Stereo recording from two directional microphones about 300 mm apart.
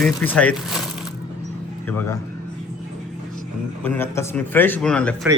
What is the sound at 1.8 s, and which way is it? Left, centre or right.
Speech, centre.